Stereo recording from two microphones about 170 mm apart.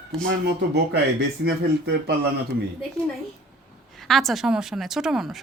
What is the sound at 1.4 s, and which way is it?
Speech, 75° right (ahead or behind).